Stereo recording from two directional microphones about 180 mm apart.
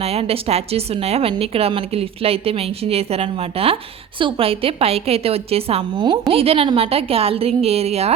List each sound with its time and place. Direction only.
0.0 s a woman's voice: 35° right (ahead or behind)